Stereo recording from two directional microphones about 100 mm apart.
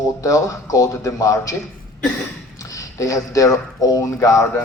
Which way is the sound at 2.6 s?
35° left (ahead or behind).